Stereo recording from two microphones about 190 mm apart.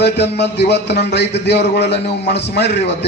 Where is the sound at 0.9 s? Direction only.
60° left (ahead or behind).